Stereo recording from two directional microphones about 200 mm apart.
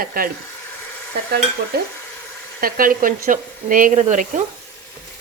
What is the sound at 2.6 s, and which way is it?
Speech, 45° right (ahead or behind).